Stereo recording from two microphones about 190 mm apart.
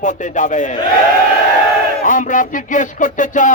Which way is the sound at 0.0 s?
40° left (ahead or behind).